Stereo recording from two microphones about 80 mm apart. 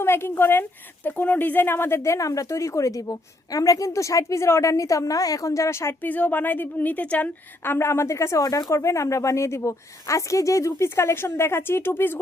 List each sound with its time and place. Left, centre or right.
0.0 s a woman's voice: left
6.0 s a woman's voice: left